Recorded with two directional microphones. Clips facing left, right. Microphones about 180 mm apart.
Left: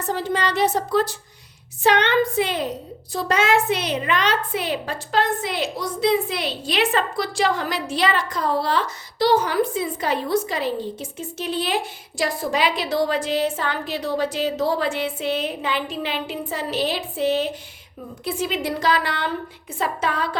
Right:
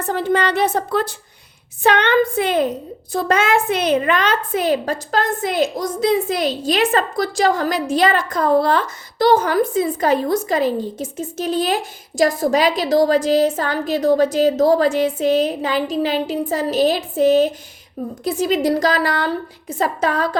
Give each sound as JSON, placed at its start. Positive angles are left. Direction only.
{"t": 0.0, "sound": "a woman's voice", "side_deg": -55}